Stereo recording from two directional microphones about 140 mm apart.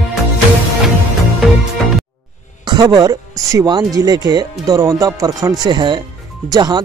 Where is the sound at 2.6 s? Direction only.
30° right (ahead or behind).